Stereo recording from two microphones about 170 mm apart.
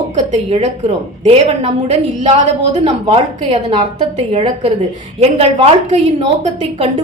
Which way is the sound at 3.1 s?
35° right (ahead or behind).